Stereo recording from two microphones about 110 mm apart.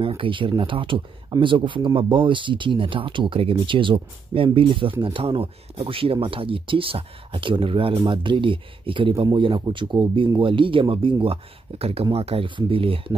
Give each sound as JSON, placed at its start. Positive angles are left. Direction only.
{"t": 0.0, "sound": "speech", "side_deg": -55}
{"t": 11.8, "sound": "speech", "side_deg": -60}